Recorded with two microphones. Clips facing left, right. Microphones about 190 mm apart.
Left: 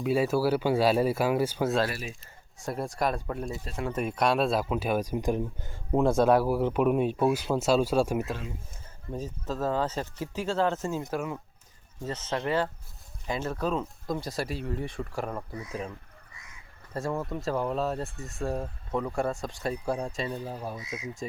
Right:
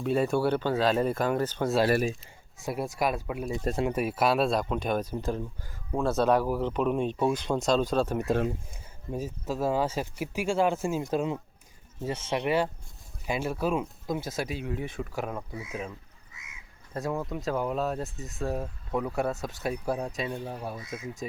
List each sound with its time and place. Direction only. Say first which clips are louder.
0.0 s speech: even; 5° left (ahead or behind)
2.6 s speech: even; 5° right (ahead or behind); by 8.3 s 10° left (ahead or behind)
8.3 s speech: right 9 dB; 50° right (ahead or behind)
9.1 s speech: right 1 dB; 10° right (ahead or behind)
12.0 s speech: right 2 dB; 10° right (ahead or behind)
16.9 s speech: even; centre (ahead or behind)
20.8 s speech: even; 55° right (ahead or behind)